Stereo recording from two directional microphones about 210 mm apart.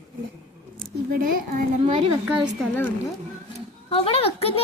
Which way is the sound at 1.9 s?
25° right (ahead or behind).